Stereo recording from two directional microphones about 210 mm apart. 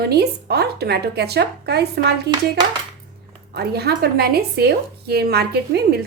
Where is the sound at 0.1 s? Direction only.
50° right (ahead or behind).